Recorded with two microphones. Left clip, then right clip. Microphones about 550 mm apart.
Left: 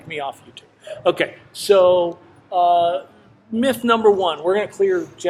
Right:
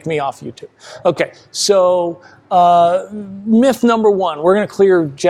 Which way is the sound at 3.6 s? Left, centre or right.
Right.